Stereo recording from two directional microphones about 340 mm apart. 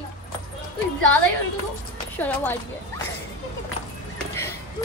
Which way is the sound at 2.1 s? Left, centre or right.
Centre.